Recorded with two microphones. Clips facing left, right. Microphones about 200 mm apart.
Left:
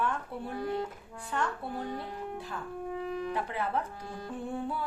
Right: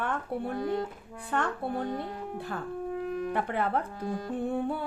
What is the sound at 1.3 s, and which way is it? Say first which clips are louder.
Music: right 3 dB; 55° right (ahead or behind).